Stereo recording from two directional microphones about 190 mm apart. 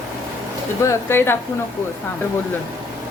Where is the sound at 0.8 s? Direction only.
15° left (ahead or behind).